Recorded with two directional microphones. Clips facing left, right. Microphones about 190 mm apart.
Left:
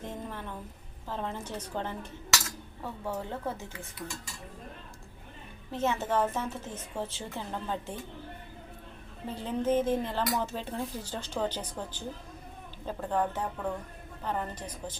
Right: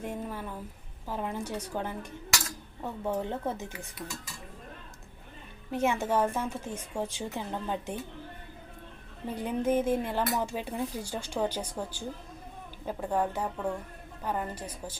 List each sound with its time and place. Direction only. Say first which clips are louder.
0.0 s speech: right 3 dB; 10° right (ahead or behind)
5.7 s speech: right 2 dB; 10° right (ahead or behind)
9.3 s speech: even; 15° right (ahead or behind)